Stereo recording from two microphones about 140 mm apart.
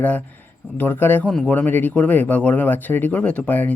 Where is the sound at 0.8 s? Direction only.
15° left (ahead or behind).